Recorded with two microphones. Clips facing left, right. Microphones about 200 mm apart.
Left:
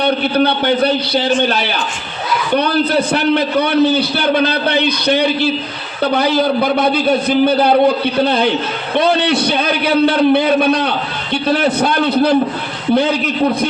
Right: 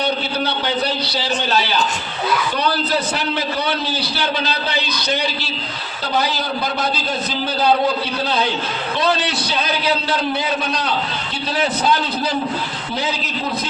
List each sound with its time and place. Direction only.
0.0 s a man's voice: 55° left (ahead or behind)